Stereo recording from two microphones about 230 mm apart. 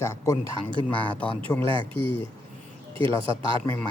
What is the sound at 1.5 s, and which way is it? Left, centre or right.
Speech, centre.